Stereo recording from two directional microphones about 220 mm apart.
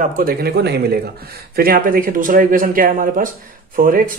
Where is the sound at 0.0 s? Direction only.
40° right (ahead or behind).